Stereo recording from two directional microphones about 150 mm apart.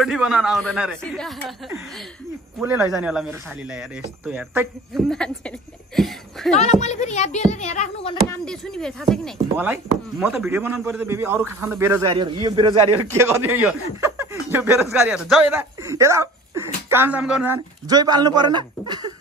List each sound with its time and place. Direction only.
0.0 s speech: centre (ahead or behind)
2.6 s speech: 10° right (ahead or behind)
6.5 s speech: 50° left (ahead or behind)
8.5 s speech: 5° left (ahead or behind)
9.6 s a man's voice: 10° right (ahead or behind)
12.1 s a man's voice: 30° right (ahead or behind)
13.1 s speech: 15° right (ahead or behind)
15.5 s speech: 20° right (ahead or behind)
17.2 s speech: 5° right (ahead or behind)
17.8 s a man's voice: 25° right (ahead or behind)